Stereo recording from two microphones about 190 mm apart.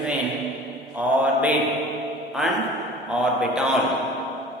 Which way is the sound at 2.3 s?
Centre (ahead or behind).